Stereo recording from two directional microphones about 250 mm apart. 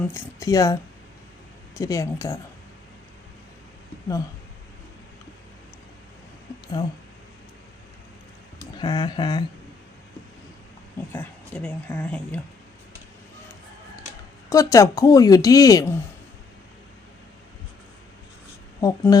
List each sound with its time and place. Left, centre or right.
0.0 s a woman's voice: centre
1.8 s a woman's voice: centre
8.8 s a woman's voice: centre
11.1 s a woman's voice: centre
14.5 s a woman's voice: centre
18.8 s a woman's voice: centre